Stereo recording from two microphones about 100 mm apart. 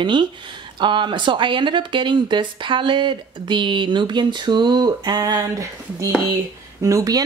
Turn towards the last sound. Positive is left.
turn(degrees=-35)  # may be behind; listen again after turning